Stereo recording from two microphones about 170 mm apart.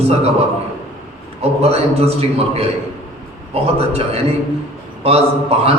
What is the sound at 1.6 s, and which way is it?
A man's voice, 35° right (ahead or behind).